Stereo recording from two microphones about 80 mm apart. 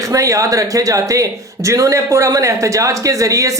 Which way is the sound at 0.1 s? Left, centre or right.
Right.